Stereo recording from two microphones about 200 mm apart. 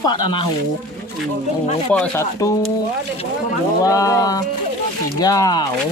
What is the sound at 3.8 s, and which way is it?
Speech, 15° left (ahead or behind).